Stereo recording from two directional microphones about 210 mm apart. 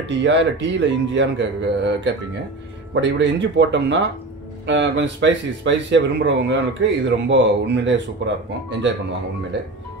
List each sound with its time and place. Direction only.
0.0 s speech: 55° right (ahead or behind)